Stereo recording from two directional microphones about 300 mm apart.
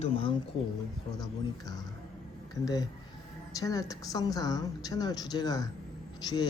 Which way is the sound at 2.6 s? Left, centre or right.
Centre.